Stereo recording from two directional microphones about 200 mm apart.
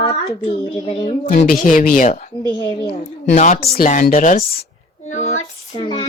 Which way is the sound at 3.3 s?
40° left (ahead or behind).